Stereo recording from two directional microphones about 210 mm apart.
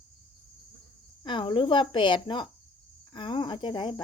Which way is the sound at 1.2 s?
25° left (ahead or behind).